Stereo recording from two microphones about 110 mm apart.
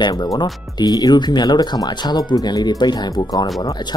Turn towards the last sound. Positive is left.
turn(degrees=40)  # may be behind; listen again after turning